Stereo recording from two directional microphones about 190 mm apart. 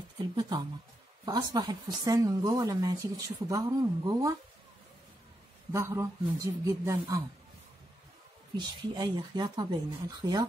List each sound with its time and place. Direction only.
1.2 s speech: 20° right (ahead or behind)
5.7 s speech: 15° right (ahead or behind)
8.5 s speech: 25° right (ahead or behind)